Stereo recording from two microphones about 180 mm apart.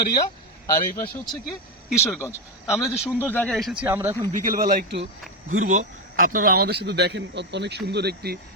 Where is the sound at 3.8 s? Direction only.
10° right (ahead or behind).